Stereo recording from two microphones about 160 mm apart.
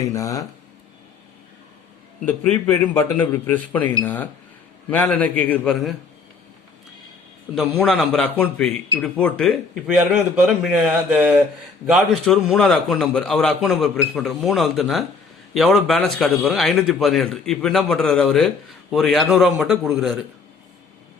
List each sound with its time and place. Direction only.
0.1 s speech: 20° left (ahead or behind)
2.6 s a man's voice: 15° left (ahead or behind)
7.5 s a man's voice: 5° left (ahead or behind)